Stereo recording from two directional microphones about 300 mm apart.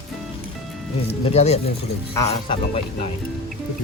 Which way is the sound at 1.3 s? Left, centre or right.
Left.